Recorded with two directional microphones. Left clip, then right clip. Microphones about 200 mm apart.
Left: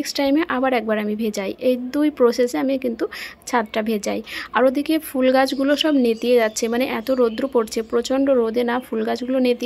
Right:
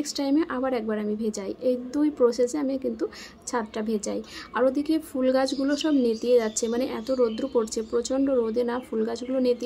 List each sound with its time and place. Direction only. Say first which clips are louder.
0.0 s a woman's voice: left 6 dB; 25° left (ahead or behind)